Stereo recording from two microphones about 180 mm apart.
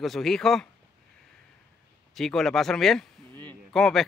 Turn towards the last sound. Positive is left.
turn(degrees=0)  # may be behind; listen again after turning